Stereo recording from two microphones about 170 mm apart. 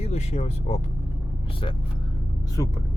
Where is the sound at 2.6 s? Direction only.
25° left (ahead or behind).